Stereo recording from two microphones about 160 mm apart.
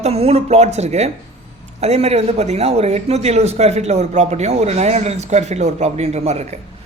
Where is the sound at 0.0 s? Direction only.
40° right (ahead or behind).